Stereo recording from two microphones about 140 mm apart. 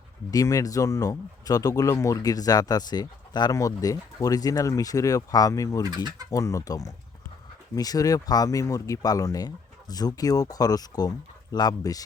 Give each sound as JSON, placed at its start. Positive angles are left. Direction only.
{"t": 0.3, "sound": "speech", "side_deg": 25}
{"t": 5.8, "sound": "speech", "side_deg": -30}
{"t": 6.3, "sound": "speech", "side_deg": 20}